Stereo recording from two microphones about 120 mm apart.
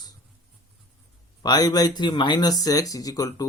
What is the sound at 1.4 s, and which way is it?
Speech, 35° left (ahead or behind).